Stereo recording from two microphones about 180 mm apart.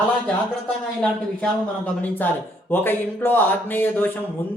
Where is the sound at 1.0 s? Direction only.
5° left (ahead or behind).